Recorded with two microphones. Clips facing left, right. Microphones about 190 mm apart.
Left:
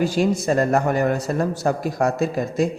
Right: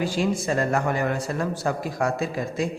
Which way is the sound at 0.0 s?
40° left (ahead or behind).